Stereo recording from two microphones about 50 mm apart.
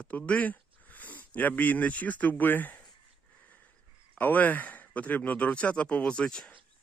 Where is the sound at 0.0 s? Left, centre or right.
Left.